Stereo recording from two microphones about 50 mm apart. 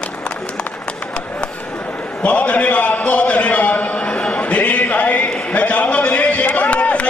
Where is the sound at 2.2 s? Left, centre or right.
Left.